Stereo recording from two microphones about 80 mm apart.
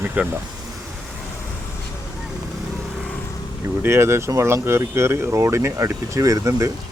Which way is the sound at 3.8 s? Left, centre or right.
Right.